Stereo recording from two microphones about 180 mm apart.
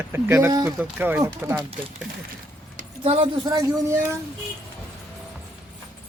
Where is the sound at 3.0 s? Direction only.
30° right (ahead or behind).